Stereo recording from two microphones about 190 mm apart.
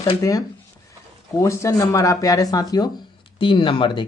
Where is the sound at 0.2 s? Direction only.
20° left (ahead or behind).